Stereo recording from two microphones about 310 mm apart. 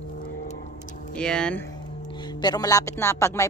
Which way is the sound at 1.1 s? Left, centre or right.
Centre.